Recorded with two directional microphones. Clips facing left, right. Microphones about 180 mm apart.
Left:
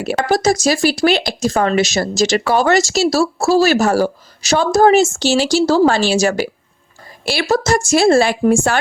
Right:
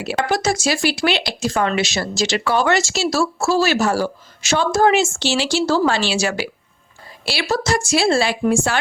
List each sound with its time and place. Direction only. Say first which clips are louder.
0.3 s a woman's voice: left 6 dB; 40° left (ahead or behind)